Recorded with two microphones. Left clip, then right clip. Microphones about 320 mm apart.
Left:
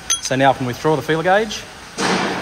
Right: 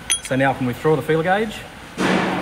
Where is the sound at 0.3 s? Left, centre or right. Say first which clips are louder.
Left 4 dB; left.